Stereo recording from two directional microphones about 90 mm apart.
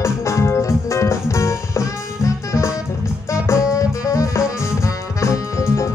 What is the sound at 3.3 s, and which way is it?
Music, 35° left (ahead or behind).